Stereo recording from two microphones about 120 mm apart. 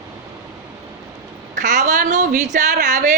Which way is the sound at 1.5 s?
90° right.